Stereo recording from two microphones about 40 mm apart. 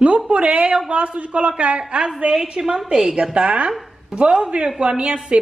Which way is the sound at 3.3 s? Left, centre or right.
Right.